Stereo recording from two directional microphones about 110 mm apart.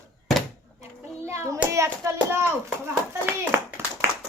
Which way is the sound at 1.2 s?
25° right (ahead or behind).